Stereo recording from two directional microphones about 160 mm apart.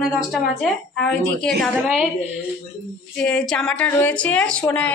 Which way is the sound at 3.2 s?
5° left (ahead or behind).